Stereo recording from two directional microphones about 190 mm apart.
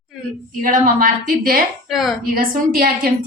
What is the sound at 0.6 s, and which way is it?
A woman's voice, 45° right (ahead or behind).